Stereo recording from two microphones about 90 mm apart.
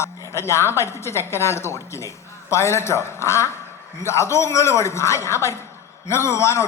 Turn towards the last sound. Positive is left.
turn(degrees=30)  # may be behind; listen again after turning